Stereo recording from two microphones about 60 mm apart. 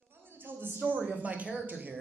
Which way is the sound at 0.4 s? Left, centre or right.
Right.